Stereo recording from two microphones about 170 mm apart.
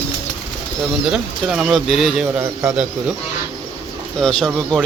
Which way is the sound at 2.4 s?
15° right (ahead or behind).